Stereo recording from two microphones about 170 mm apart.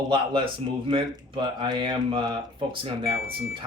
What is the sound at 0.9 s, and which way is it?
Speech, 30° right (ahead or behind).